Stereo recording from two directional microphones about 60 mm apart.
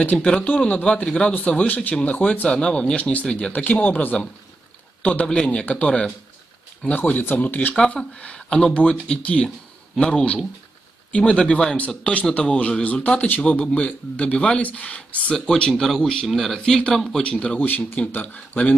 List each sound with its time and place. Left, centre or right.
0.0 s a man's voice: left
5.2 s a man's voice: centre
7.0 s a man's voice: left
8.0 s a man's voice: centre
17.6 s a man's voice: left